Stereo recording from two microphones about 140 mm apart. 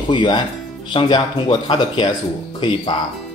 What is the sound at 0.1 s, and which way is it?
Speech, 35° left (ahead or behind).